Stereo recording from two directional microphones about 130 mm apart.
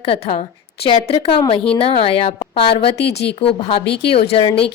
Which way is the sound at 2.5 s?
50° left (ahead or behind).